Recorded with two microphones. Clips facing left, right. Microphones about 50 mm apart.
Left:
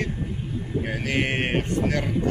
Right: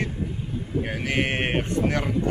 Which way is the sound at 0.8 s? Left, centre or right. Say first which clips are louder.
Even; centre.